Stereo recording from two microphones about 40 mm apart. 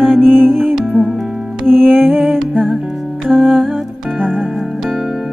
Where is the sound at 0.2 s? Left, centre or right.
Right.